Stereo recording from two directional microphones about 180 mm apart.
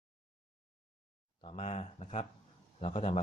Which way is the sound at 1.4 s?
35° left (ahead or behind).